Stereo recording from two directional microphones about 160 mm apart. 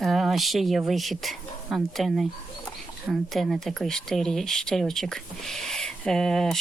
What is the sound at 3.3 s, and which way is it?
Speech, centre (ahead or behind).